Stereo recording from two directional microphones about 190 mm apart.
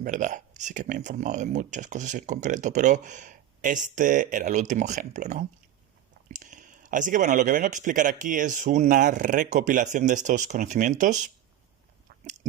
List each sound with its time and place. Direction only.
0.0 s speech: 45° right (ahead or behind)